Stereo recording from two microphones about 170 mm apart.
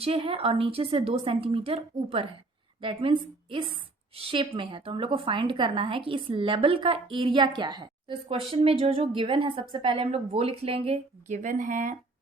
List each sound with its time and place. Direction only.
0.0 s a woman's voice: 35° right (ahead or behind)